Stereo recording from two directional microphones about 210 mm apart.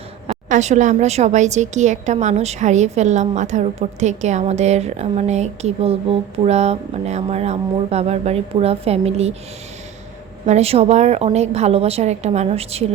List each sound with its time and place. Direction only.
0.3 s a woman's voice: 35° right (ahead or behind)
10.4 s a woman's voice: 30° right (ahead or behind)